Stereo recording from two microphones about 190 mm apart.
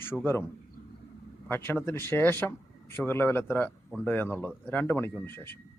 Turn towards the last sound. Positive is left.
turn(degrees=10)  # may be behind; listen again after turning